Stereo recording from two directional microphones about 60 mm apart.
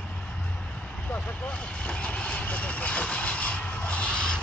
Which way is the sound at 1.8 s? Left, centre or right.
Left.